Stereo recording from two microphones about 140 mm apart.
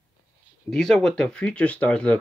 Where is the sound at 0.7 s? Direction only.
5° left (ahead or behind).